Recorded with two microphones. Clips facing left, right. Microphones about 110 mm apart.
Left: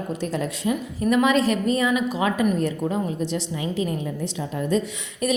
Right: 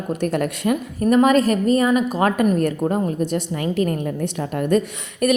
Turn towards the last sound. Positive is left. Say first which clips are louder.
# right 5 dB
turn(degrees=-65)  # may be behind; listen again after turning